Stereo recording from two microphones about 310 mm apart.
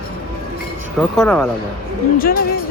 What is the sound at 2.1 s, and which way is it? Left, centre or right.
Speech, left.